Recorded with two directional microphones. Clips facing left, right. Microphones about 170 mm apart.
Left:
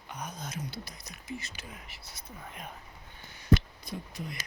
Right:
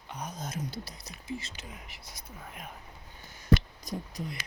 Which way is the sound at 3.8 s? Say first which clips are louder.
Right 3 dB; 40° right (ahead or behind).